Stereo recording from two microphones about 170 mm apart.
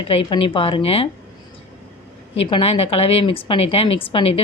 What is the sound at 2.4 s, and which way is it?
A woman's voice, 35° left (ahead or behind).